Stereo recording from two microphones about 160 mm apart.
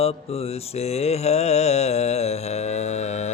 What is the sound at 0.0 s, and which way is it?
Mantra, 40° left (ahead or behind).